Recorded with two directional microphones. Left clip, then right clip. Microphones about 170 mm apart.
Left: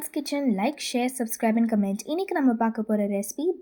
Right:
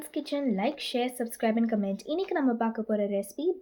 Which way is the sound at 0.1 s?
40° left (ahead or behind).